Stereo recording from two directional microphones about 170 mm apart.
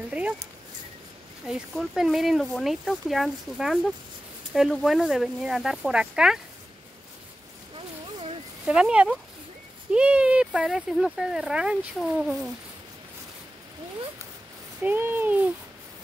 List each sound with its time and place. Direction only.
1.5 s speech: centre (ahead or behind)
7.7 s a sound: 30° right (ahead or behind)
8.6 s speech: 5° right (ahead or behind)
14.8 s speech: 10° right (ahead or behind)